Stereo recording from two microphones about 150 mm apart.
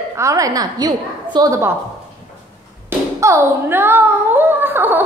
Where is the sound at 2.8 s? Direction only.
15° right (ahead or behind).